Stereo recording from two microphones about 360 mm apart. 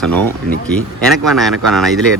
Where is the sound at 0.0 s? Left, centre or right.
Centre.